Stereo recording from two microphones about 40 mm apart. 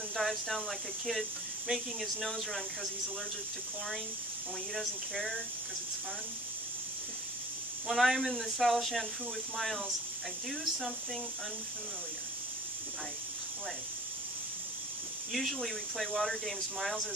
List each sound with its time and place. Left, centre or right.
0.1 s speech: centre
4.7 s speech: centre
7.9 s speech: centre
15.3 s speech: centre